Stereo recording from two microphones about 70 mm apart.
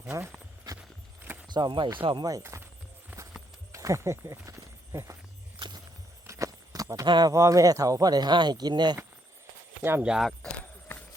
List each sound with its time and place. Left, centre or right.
0.0 s speech: right
1.5 s speech: right
2.4 s chopping: right
3.1 s a sound: right
3.7 s walk: right
5.5 s walk: right
6.2 s a sound: right
7.3 s speech: right
10.0 s speech: centre
10.6 s run: left